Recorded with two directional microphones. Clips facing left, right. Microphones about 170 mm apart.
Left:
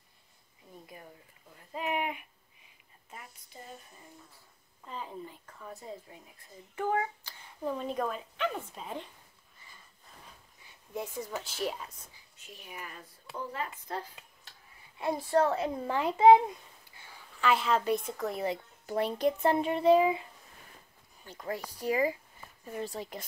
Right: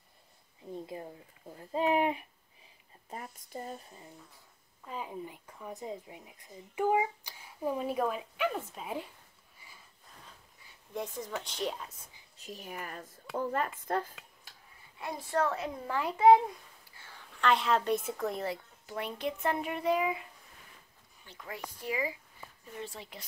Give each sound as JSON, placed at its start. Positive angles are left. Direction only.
{"t": 0.7, "sound": "speech", "side_deg": -25}
{"t": 3.1, "sound": "speech", "side_deg": -45}
{"t": 4.8, "sound": "speech", "side_deg": -10}
{"t": 9.6, "sound": "sniff", "side_deg": -10}
{"t": 10.9, "sound": "speech", "side_deg": 10}
{"t": 12.4, "sound": "speech", "side_deg": -40}
{"t": 15.0, "sound": "a child's voice", "side_deg": 30}
{"t": 18.9, "sound": "speech", "side_deg": 35}
{"t": 21.2, "sound": "speech", "side_deg": 40}